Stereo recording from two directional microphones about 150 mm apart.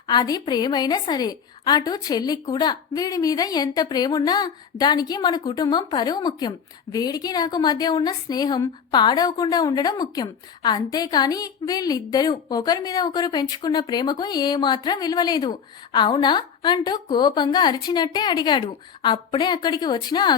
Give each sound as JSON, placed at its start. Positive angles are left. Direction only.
{"t": 0.1, "sound": "a woman's voice", "side_deg": 25}